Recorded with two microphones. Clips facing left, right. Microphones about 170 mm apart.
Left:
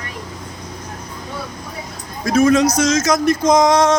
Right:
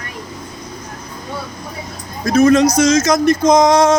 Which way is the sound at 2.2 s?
5° left (ahead or behind).